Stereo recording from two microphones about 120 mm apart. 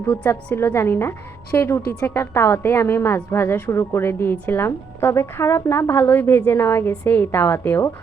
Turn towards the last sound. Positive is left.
turn(degrees=15)  # may be behind; listen again after turning